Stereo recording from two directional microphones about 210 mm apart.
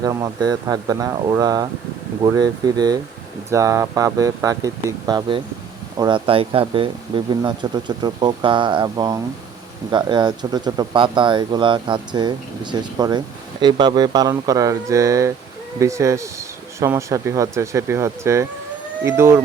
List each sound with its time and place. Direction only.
0.0 s speech: 15° right (ahead or behind)